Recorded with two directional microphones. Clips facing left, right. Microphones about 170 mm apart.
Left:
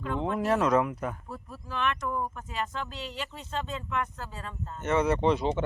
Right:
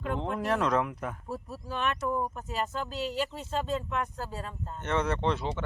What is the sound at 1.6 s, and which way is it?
Speech, 40° right (ahead or behind).